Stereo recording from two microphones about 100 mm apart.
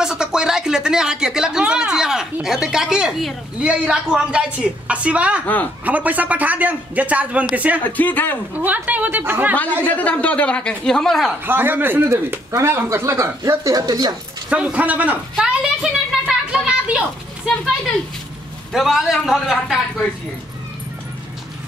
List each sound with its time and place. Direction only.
0.0 s a sound: 5° right (ahead or behind)
2.4 s a woman's voice: 5° right (ahead or behind)
7.8 s speech: 20° left (ahead or behind)
8.5 s a woman's voice: 15° right (ahead or behind)
9.8 s speech: 15° left (ahead or behind)
11.4 s speech: 20° right (ahead or behind); by 14.1 s 40° right (ahead or behind)
14.5 s a woman's voice: 15° right (ahead or behind)
15.3 s a sound: 10° right (ahead or behind)
18.7 s speech: 5° right (ahead or behind)